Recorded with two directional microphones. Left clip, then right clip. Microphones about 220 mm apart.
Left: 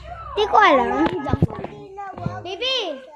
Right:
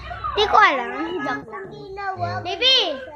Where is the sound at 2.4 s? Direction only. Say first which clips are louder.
Right 6 dB; 20° left (ahead or behind).